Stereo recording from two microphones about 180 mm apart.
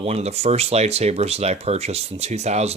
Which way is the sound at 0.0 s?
35° right (ahead or behind).